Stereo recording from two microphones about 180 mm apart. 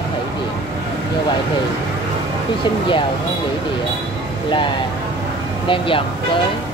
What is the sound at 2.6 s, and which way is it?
Speech, 25° left (ahead or behind).